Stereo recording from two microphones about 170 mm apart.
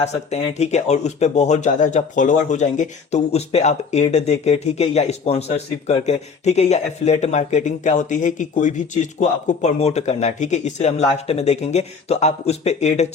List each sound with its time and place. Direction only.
0.0 s speech: 40° left (ahead or behind)